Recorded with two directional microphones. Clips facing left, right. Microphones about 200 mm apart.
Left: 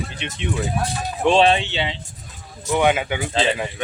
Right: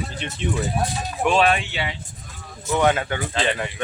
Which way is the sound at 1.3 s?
25° left (ahead or behind).